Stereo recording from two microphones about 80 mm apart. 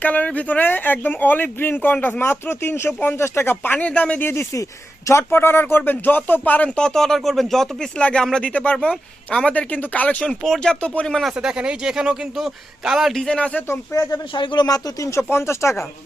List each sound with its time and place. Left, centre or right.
0.0 s speech: centre
4.2 s speech: left
10.4 s speech: centre
11.3 s speech: centre
13.2 s speech: centre
13.9 s speech: left
14.3 s speech: left
15.3 s speech: left